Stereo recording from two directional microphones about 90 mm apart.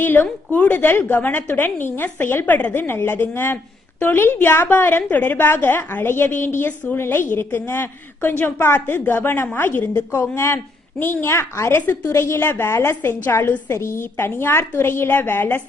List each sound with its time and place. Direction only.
0.0 s a woman's voice: 20° left (ahead or behind)